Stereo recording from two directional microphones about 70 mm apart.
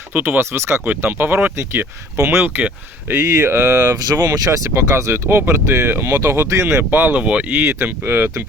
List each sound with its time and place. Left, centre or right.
0.1 s speech: right
1.5 s speech: right
3.2 s speech: right
4.4 s speech: right
6.9 s speech: right